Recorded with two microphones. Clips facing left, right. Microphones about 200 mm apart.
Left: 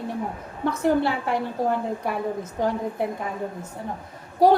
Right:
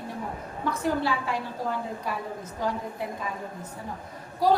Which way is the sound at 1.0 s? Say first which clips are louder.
Left 4 dB; 60° left (ahead or behind).